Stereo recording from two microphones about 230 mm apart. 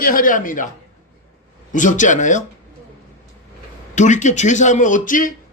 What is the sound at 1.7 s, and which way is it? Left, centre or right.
Speech, left.